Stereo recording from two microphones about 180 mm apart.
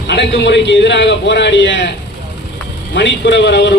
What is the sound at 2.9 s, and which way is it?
Speech, 75° left (ahead or behind).